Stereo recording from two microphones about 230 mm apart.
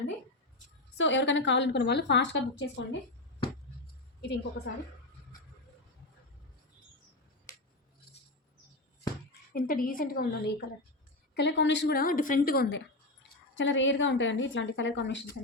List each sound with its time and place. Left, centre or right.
0.9 s a woman's voice: left
4.2 s a woman's voice: left
9.5 s a woman's voice: left
11.3 s a woman's voice: left